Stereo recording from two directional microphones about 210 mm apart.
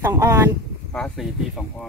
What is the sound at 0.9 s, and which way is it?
Speech, 5° left (ahead or behind).